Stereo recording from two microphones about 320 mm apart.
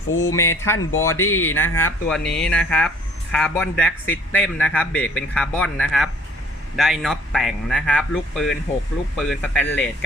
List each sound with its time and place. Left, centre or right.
0.2 s speech: centre
1.1 s speech: left
1.5 s a man's voice: centre